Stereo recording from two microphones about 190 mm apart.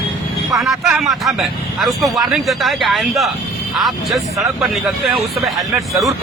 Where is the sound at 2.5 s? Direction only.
Centre (ahead or behind).